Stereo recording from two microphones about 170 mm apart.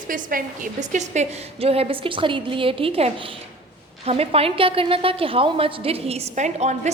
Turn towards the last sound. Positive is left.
turn(degrees=-40)  # may be behind; listen again after turning